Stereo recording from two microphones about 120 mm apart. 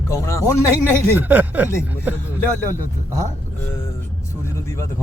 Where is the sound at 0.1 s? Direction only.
25° left (ahead or behind).